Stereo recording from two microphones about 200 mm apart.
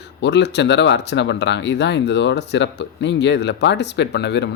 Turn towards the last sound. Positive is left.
turn(degrees=60)  # may be behind; listen again after turning